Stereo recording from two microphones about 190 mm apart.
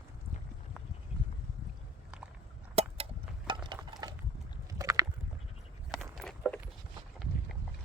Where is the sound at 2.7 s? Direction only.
30° right (ahead or behind).